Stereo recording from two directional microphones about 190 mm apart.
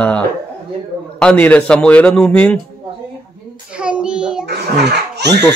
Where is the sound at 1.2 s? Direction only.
5° left (ahead or behind).